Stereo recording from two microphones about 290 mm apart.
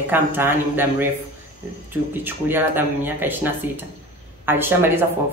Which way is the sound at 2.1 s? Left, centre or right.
Centre.